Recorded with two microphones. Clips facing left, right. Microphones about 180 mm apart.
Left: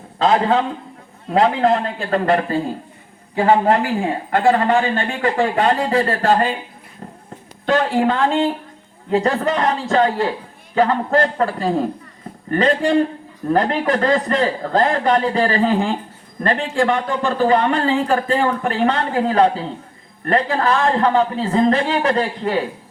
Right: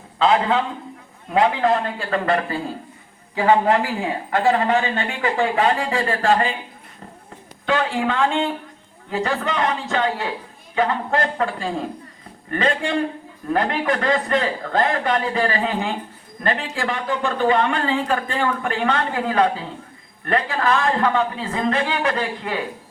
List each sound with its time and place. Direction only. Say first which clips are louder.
0.2 s speech: left 2 dB; 35° left (ahead or behind)
7.6 s speech: left 4 dB; 40° left (ahead or behind)